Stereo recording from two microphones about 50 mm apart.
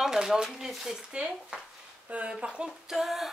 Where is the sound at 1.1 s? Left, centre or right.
Centre.